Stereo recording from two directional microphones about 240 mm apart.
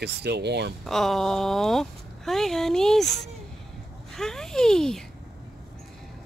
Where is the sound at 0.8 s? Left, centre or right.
Centre.